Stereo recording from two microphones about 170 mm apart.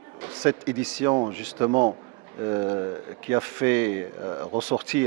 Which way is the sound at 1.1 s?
35° right (ahead or behind).